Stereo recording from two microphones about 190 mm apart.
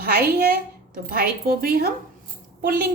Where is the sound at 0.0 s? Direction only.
50° right (ahead or behind).